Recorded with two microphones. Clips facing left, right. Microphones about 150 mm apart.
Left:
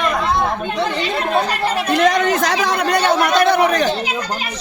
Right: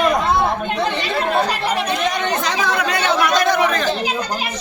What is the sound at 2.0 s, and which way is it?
Chatter, 90° left.